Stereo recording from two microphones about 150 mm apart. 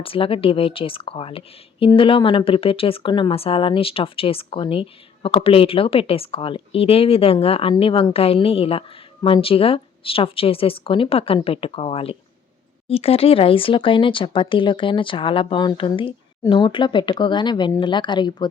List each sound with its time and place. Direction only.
0.0 s a woman's voice: 35° left (ahead or behind)